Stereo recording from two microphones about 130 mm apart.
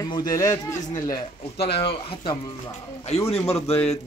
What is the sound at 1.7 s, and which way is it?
Speech, 45° left (ahead or behind).